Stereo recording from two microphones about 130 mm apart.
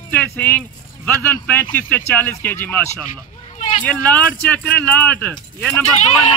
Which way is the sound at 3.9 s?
10° left (ahead or behind).